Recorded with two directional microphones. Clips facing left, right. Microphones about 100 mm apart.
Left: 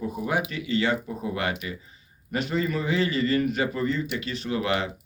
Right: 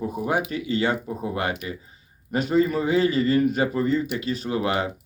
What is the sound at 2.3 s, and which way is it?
Speech, 35° right (ahead or behind).